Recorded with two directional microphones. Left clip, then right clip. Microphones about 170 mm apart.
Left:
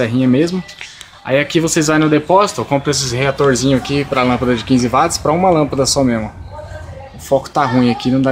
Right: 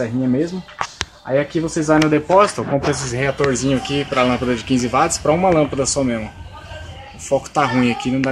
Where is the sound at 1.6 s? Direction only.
25° left (ahead or behind).